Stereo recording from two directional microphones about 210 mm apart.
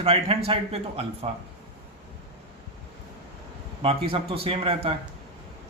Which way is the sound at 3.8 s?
25° right (ahead or behind).